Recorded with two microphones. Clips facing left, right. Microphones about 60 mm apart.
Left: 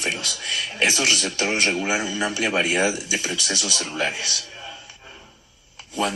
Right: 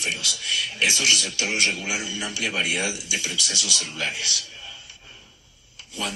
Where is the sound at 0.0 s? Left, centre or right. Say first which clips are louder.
Left 2 dB; left.